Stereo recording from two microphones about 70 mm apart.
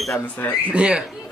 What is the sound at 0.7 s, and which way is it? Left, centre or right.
Speech, centre.